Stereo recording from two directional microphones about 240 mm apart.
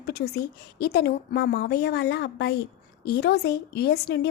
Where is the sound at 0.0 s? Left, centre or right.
Left.